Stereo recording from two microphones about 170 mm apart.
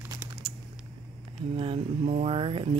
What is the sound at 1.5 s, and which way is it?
Speech, 35° right (ahead or behind).